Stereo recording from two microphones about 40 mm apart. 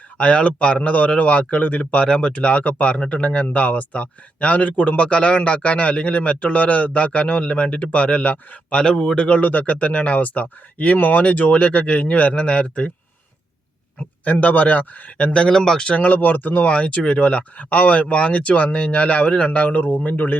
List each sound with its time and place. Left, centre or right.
0.2 s a man's voice: left
3.4 s a man's voice: left
8.8 s a man's voice: centre
9.4 s speech: left
11.2 s speech: left
14.3 s speech: left
15.3 s a man's voice: left
15.5 s speech: centre
16.0 s speech: left
16.7 s speech: left